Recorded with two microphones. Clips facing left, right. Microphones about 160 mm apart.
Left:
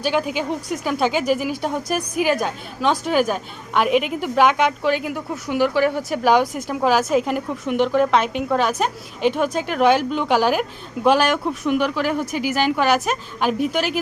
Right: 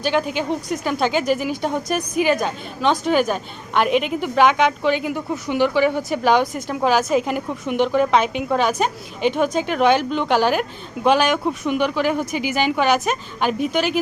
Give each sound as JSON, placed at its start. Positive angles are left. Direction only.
{"t": 0.0, "sound": "a woman's voice", "side_deg": 5}